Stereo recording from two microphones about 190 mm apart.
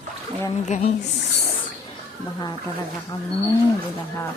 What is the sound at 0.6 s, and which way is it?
Speech, 40° left (ahead or behind).